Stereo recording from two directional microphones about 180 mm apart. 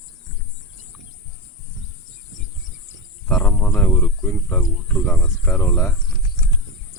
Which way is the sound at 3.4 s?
5° left (ahead or behind).